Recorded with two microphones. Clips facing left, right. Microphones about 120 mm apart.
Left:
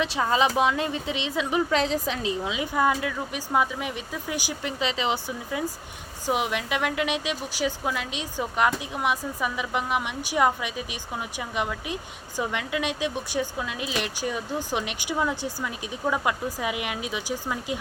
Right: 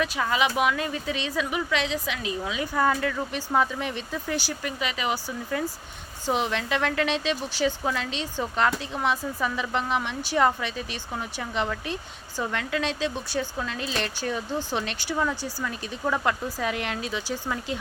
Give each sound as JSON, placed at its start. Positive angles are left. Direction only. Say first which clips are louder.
{"t": 0.0, "sound": "speech", "louder": "left 2 dB", "side_deg": 30}
{"t": 4.8, "sound": "speech", "louder": "left 3 dB", "side_deg": 25}
{"t": 6.2, "sound": "speech", "louder": "even", "side_deg": 10}